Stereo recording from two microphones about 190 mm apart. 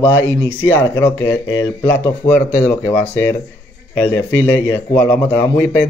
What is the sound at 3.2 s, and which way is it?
Speech, 10° left (ahead or behind).